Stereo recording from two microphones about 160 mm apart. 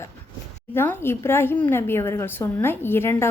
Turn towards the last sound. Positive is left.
turn(degrees=15)  # may be behind; listen again after turning